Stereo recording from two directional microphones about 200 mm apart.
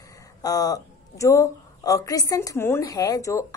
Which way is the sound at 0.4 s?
20° left (ahead or behind).